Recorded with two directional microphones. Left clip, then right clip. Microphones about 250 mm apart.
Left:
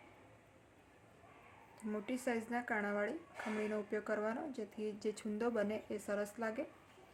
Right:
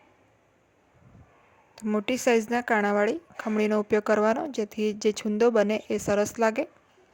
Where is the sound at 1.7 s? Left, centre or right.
Right.